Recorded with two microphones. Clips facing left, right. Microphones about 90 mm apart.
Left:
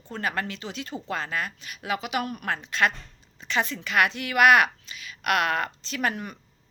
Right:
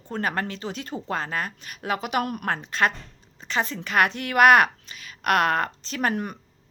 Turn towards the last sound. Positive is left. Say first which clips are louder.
# right 3 dB
turn(degrees=-45)  # may be behind; listen again after turning